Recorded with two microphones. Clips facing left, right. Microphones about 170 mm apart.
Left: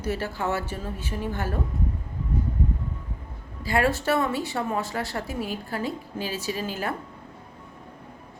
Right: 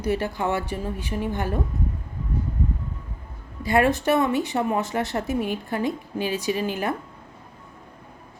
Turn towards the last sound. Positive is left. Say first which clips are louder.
# right 4 dB
turn(degrees=-15)  # may be behind; listen again after turning